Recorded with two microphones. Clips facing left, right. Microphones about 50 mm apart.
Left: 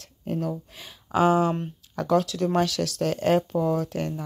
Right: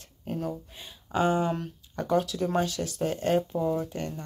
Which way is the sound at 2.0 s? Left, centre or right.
Left.